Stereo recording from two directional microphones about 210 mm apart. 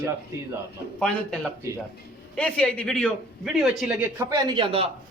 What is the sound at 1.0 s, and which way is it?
A man's voice, 5° left (ahead or behind).